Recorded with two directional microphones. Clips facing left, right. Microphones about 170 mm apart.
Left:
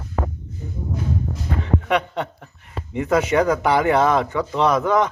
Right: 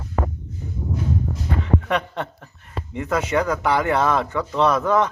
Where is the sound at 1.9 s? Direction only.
15° left (ahead or behind).